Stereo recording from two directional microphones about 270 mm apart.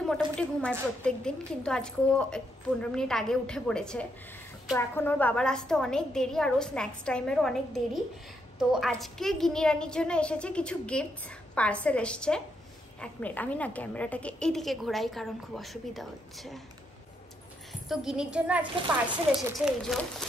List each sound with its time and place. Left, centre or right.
0.0 s a woman's voice: centre
17.8 s a woman's voice: centre